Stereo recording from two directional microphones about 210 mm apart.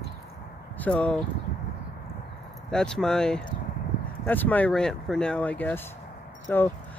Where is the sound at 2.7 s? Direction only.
5° left (ahead or behind).